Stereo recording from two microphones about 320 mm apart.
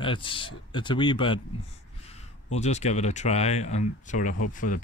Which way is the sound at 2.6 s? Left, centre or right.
Left.